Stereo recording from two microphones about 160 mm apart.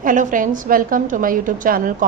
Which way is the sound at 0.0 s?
55° right (ahead or behind).